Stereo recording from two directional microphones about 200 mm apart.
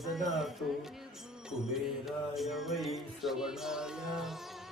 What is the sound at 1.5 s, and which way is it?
Mantra, centre (ahead or behind).